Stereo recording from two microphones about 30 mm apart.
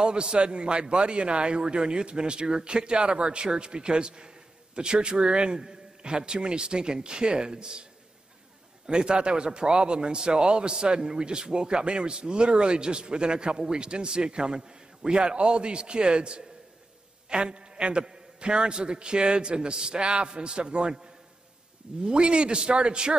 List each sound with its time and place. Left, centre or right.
0.0 s a man's voice: right
8.8 s a man's voice: right